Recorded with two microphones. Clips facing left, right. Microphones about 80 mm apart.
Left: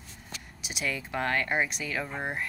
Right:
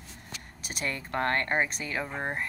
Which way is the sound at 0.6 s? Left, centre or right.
Right.